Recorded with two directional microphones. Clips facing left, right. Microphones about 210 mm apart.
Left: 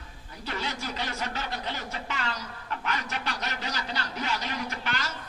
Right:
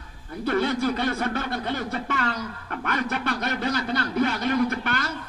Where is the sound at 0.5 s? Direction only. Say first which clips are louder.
Right 12 dB; 55° right (ahead or behind).